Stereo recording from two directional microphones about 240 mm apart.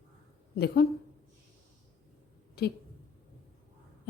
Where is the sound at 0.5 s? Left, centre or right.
Left.